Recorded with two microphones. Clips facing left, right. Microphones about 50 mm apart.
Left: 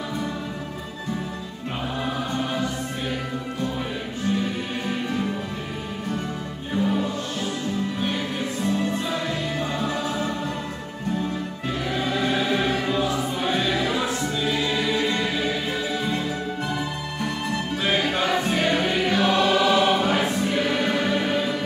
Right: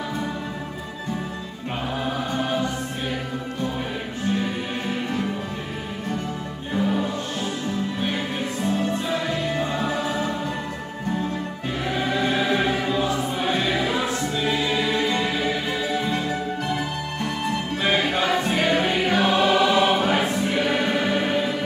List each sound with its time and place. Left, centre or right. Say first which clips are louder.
6.7 s music: even; centre
8.6 s music: right 1 dB; centre
11.9 s music: right 2 dB; centre
12.4 s choir: right 1 dB; centre
15.1 s music: right 1 dB; centre
17.8 s music: right 2 dB; centre